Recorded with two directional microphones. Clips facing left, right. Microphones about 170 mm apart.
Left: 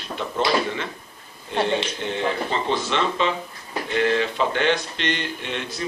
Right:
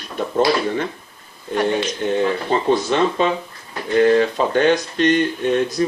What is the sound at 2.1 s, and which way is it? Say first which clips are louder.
Speech: right 6 dB; 45° right (ahead or behind).